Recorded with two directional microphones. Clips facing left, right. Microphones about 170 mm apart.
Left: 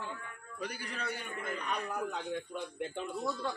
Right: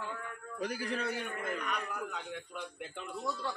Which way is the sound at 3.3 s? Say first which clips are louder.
Right 1 dB; 15° left (ahead or behind).